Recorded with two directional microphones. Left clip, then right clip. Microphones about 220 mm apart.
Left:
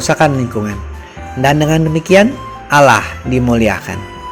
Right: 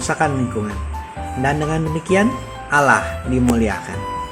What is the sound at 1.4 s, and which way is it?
Speech, 30° left (ahead or behind).